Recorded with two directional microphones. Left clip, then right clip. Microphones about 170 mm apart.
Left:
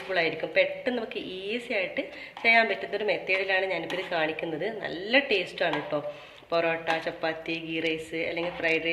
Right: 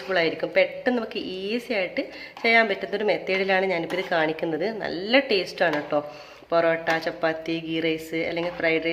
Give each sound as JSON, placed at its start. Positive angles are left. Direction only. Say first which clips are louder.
{"t": 0.1, "sound": "a woman's voice", "louder": "right 4 dB", "side_deg": -50}